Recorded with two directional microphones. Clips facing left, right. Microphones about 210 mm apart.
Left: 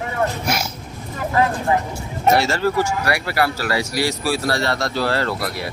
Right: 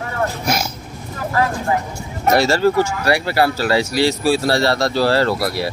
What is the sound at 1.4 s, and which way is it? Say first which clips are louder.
Speech: left 1 dB; 20° left (ahead or behind).